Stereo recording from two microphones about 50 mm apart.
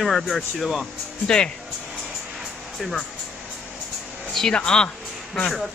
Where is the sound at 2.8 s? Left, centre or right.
Centre.